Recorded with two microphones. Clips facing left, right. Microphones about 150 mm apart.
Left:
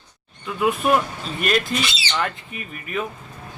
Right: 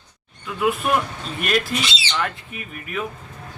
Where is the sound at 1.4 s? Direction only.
Centre (ahead or behind).